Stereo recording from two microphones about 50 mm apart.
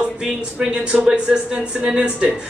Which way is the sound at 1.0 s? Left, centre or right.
Centre.